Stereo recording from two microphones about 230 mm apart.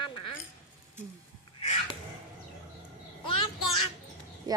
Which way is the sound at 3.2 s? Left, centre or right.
Left.